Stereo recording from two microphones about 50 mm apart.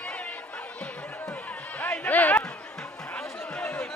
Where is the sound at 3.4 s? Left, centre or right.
Centre.